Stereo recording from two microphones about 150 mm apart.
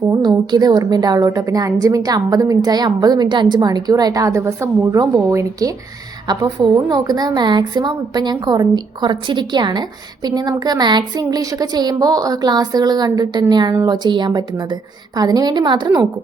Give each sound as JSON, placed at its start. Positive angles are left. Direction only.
{"t": 0.1, "sound": "a woman's voice", "side_deg": -30}